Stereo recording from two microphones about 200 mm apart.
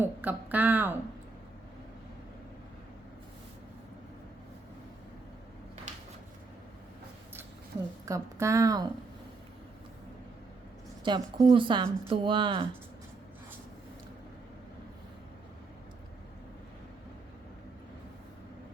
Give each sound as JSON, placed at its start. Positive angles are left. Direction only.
{"t": 0.0, "sound": "a woman's voice", "side_deg": -10}
{"t": 8.0, "sound": "a woman's voice", "side_deg": -15}
{"t": 11.0, "sound": "speech", "side_deg": -25}